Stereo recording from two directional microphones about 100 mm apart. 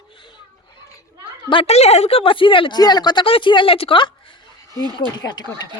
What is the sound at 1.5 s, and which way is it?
Speech, 75° left (ahead or behind).